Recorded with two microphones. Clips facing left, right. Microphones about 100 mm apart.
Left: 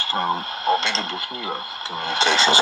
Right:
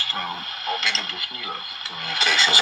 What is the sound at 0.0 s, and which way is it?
Speech, 30° left (ahead or behind).